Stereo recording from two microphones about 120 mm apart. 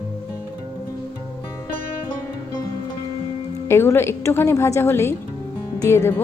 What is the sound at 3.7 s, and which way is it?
A woman's voice, 20° left (ahead or behind).